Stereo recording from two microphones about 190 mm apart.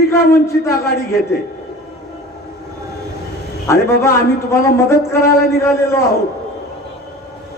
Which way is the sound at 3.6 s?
15° left (ahead or behind).